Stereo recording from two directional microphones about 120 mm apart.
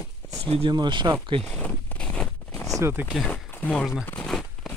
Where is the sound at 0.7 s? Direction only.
40° right (ahead or behind).